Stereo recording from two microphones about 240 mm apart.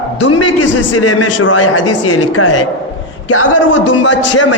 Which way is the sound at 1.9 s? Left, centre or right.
Left.